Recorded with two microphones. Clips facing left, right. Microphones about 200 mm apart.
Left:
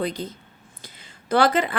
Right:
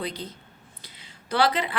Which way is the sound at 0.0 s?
45° left (ahead or behind).